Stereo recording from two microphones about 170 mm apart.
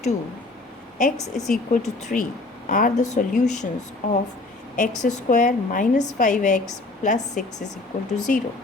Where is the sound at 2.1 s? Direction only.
55° left (ahead or behind).